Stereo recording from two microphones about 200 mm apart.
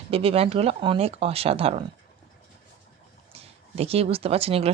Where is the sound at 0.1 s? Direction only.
30° right (ahead or behind).